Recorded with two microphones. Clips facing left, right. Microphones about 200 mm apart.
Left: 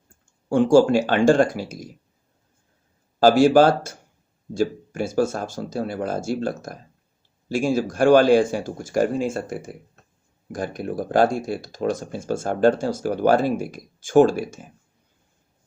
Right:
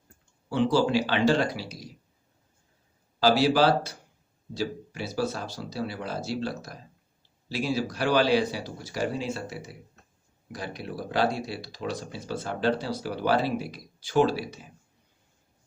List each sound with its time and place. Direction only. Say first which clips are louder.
0.4 s speech: left 8 dB; 50° left (ahead or behind)
3.2 s speech: left 7 dB; 50° left (ahead or behind)